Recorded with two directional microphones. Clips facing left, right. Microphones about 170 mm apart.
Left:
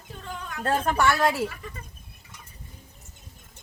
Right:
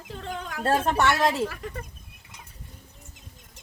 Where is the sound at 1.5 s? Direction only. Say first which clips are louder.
Right 5 dB; 65° right (ahead or behind).